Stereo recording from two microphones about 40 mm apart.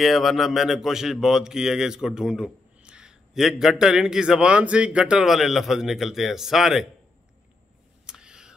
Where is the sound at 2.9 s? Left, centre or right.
Right.